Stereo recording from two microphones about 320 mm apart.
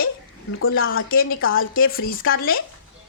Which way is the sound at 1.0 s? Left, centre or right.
Left.